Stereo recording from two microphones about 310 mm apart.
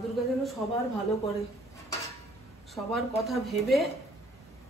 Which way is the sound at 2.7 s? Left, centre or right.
Centre.